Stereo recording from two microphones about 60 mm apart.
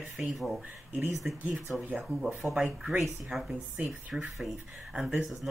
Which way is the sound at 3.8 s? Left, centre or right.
Right.